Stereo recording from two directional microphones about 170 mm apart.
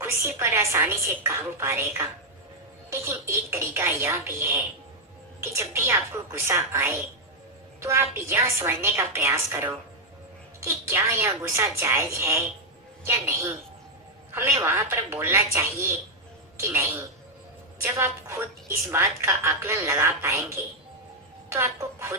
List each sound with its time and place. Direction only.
0.0 s a woman's voice: 15° right (ahead or behind)
21.5 s a woman's voice: 15° right (ahead or behind)